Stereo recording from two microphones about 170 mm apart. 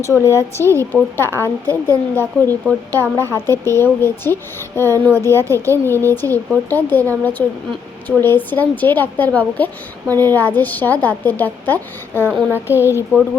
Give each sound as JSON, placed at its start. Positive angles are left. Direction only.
{"t": 0.0, "sound": "speech", "side_deg": 15}
{"t": 12.7, "sound": "speech", "side_deg": -15}